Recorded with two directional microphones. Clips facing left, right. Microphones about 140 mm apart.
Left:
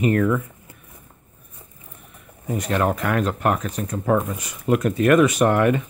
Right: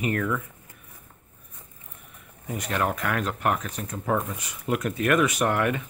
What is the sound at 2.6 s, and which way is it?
Speech, 35° left (ahead or behind).